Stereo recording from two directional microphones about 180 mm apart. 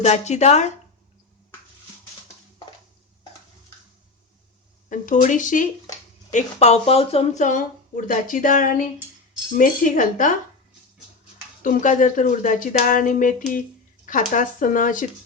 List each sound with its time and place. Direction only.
0.0 s speech: 40° left (ahead or behind)
4.9 s speech: 45° left (ahead or behind)
11.6 s speech: 45° left (ahead or behind)